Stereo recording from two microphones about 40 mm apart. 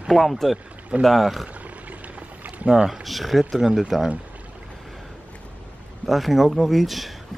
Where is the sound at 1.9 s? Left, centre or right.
Right.